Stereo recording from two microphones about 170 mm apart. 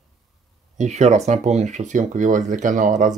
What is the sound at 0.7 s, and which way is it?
Speech, 45° right (ahead or behind).